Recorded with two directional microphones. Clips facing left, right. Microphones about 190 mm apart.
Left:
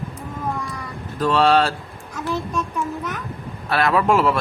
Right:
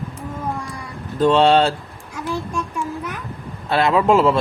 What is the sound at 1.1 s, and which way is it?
Speech, 25° right (ahead or behind).